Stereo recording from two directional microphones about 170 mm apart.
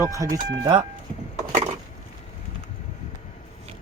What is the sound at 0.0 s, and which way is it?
Speech, 20° right (ahead or behind).